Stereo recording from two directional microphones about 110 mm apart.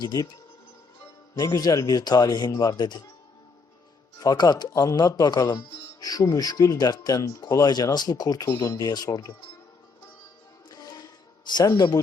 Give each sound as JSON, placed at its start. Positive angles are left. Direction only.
{"t": 0.0, "sound": "speech", "side_deg": 35}
{"t": 1.4, "sound": "speech", "side_deg": 35}
{"t": 4.2, "sound": "speech", "side_deg": 35}
{"t": 10.7, "sound": "music", "side_deg": 35}
{"t": 11.7, "sound": "speech", "side_deg": 35}